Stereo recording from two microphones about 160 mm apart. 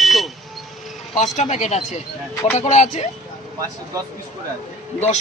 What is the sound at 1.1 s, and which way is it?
Speech, 50° left (ahead or behind).